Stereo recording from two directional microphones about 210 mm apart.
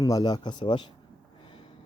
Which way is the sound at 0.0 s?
20° left (ahead or behind).